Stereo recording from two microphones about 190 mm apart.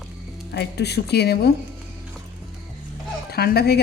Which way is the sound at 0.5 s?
60° left (ahead or behind).